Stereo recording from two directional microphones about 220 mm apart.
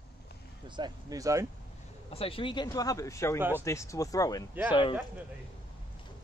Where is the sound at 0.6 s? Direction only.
20° right (ahead or behind).